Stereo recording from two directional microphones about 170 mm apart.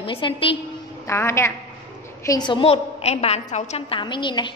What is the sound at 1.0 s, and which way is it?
A woman's voice, 15° left (ahead or behind).